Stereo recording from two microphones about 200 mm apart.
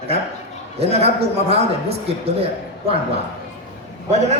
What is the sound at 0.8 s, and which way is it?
A man's voice, 30° right (ahead or behind).